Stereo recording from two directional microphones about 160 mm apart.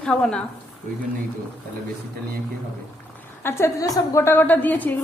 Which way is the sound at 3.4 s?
15° left (ahead or behind).